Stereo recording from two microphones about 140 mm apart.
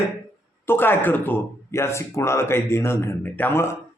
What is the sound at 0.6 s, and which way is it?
Speech, 15° left (ahead or behind).